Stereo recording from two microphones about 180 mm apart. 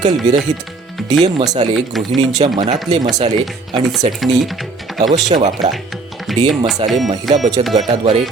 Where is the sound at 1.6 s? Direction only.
35° right (ahead or behind).